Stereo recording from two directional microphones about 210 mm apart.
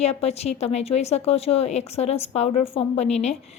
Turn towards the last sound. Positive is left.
turn(degrees=30)  # may be behind; listen again after turning